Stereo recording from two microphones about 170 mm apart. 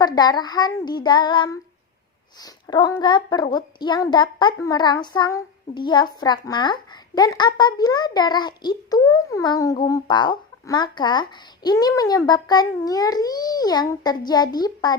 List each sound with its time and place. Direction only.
0.0 s a woman's voice: 25° left (ahead or behind)